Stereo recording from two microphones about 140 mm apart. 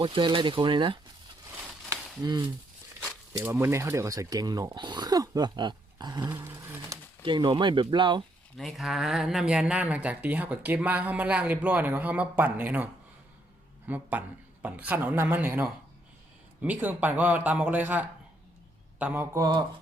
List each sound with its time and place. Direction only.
0.0 s speech: 35° right (ahead or behind)
1.9 s a sound: 20° right (ahead or behind)
3.3 s speech: 20° right (ahead or behind)
7.2 s speech: 35° right (ahead or behind)
8.5 s speech: centre (ahead or behind); by 19.5 s 20° right (ahead or behind)